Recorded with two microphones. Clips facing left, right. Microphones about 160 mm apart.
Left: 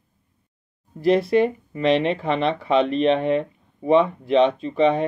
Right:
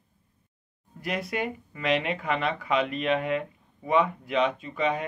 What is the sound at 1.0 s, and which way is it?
Speech, 30° left (ahead or behind).